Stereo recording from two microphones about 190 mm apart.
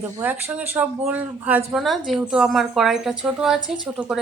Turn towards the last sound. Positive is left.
turn(degrees=-5)  # may be behind; listen again after turning